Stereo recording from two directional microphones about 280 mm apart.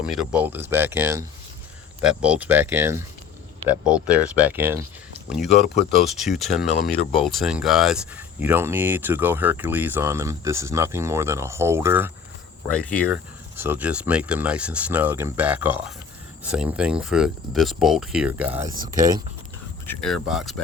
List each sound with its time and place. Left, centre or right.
0.0 s speech: centre
13.6 s speech: centre
18.7 s speech: right
19.9 s speech: centre